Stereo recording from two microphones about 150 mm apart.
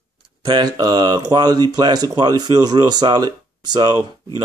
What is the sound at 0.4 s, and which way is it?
Speech, 25° right (ahead or behind).